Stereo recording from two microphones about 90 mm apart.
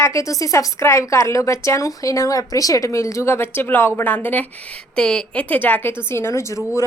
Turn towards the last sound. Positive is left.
turn(degrees=35)  # may be behind; listen again after turning